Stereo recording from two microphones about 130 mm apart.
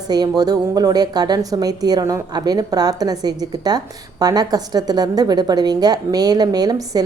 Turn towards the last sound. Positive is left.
turn(degrees=-30)  # may be behind; listen again after turning